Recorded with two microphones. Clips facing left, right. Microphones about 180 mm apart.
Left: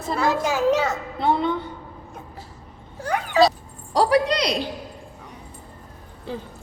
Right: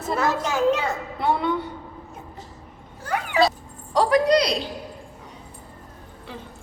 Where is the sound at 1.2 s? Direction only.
25° left (ahead or behind).